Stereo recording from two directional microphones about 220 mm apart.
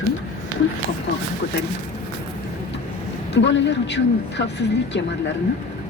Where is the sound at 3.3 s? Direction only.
55° left (ahead or behind).